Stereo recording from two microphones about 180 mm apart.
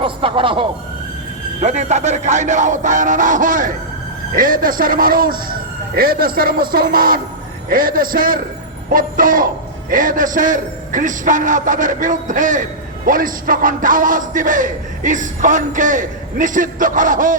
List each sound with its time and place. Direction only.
0.0 s speech: 30° right (ahead or behind)
1.6 s a man's voice: 40° right (ahead or behind)